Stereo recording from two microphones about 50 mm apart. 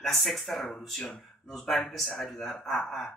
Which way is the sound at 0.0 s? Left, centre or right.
Centre.